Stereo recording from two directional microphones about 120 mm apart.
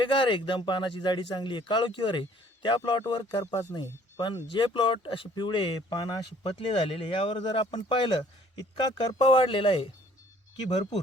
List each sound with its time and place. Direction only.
0.0 s a man's voice: 45° left (ahead or behind)